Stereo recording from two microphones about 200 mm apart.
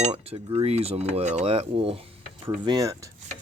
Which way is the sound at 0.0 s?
30° right (ahead or behind).